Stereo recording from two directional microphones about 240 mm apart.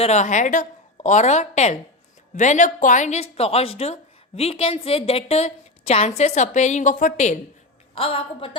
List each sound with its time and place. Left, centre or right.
0.0 s speech: left